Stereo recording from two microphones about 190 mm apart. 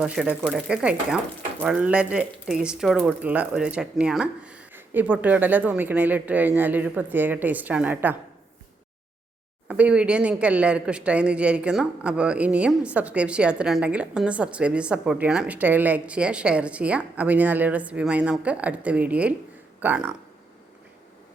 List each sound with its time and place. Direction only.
0.0 s speech: 5° right (ahead or behind)
9.6 s speech: 5° right (ahead or behind)